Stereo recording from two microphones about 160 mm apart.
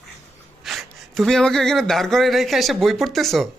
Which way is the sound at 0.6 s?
Centre (ahead or behind).